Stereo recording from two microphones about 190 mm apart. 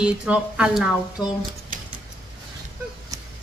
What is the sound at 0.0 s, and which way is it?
Speech, 5° right (ahead or behind).